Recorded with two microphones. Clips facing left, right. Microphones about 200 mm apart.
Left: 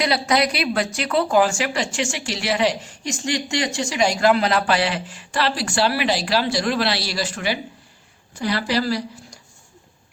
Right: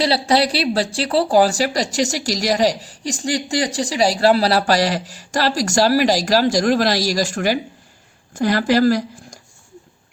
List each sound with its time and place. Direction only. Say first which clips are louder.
0.0 s speech: right 3 dB; 30° right (ahead or behind); by 9.4 s 45° right (ahead or behind)